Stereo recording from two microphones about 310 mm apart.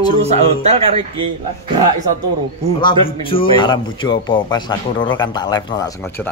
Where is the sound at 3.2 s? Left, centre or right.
Centre.